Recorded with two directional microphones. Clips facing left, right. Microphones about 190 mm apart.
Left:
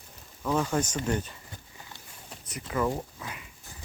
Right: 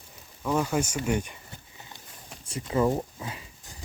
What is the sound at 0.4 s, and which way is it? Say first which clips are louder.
Speech: right 1 dB; 10° right (ahead or behind).